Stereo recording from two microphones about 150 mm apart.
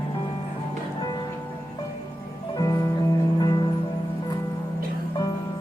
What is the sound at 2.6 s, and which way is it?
Music, 25° left (ahead or behind).